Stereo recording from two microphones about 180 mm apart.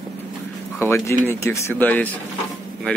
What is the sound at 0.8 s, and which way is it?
Speech, 15° left (ahead or behind).